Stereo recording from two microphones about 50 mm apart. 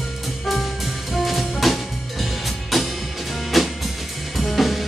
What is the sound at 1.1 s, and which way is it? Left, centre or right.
Music, centre.